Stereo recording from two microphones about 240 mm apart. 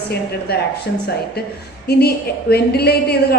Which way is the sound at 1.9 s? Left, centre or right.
Left.